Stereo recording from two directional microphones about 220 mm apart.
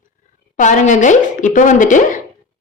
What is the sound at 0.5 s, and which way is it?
A woman's voice, 35° left (ahead or behind).